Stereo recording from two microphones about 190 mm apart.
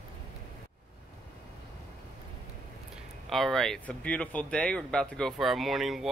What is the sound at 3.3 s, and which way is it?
Speech, centre (ahead or behind).